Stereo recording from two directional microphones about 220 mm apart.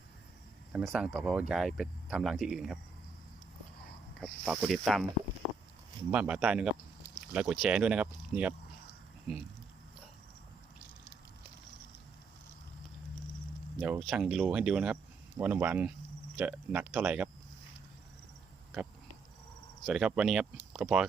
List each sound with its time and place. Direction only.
0.7 s speech: 5° right (ahead or behind)
4.2 s speech: centre (ahead or behind)
6.1 s speech: 5° right (ahead or behind)
13.8 s speech: 5° right (ahead or behind)
19.8 s speech: 5° right (ahead or behind)